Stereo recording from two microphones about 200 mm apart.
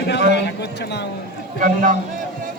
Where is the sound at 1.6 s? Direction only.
40° right (ahead or behind).